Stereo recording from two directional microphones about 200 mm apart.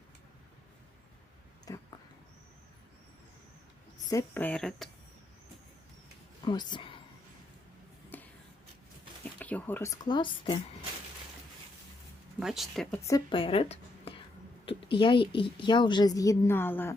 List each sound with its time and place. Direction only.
1.6 s a sound: 20° left (ahead or behind)
4.1 s speech: 10° left (ahead or behind)
6.4 s speech: 20° left (ahead or behind)
8.1 s a sound: 10° left (ahead or behind)
9.2 s speech: 10° left (ahead or behind); by 10.6 s 25° left (ahead or behind)
12.4 s speech: centre (ahead or behind)
13.0 s a woman's voice: 15° left (ahead or behind)